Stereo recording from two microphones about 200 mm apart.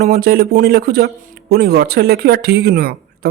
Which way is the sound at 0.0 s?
50° right (ahead or behind).